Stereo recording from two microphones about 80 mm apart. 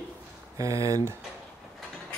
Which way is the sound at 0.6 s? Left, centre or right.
Right.